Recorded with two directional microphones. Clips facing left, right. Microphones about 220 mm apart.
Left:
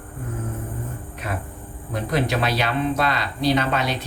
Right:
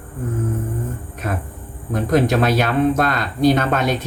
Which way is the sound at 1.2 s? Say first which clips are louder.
Right 5 dB; 50° right (ahead or behind).